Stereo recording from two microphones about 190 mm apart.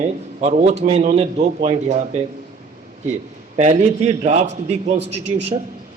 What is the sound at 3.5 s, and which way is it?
A man's voice, 35° right (ahead or behind).